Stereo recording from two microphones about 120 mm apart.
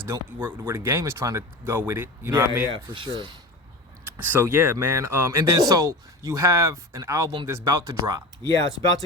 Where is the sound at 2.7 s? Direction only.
45° right (ahead or behind).